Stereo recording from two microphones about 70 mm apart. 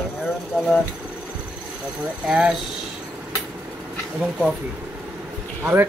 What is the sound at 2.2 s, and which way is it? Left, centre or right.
Speech, centre.